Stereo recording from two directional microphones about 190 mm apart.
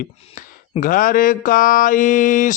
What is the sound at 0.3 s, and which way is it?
Mantra, 45° left (ahead or behind).